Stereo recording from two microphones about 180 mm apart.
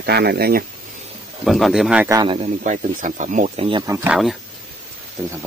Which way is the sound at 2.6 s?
45° right (ahead or behind).